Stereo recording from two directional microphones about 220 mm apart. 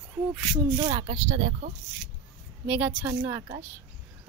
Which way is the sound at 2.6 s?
5° right (ahead or behind).